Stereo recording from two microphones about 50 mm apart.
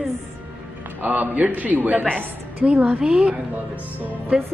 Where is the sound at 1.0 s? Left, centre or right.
Right.